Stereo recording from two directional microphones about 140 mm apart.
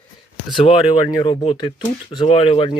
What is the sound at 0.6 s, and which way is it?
Speech, 40° left (ahead or behind).